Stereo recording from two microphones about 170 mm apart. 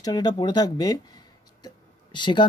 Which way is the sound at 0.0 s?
25° left (ahead or behind).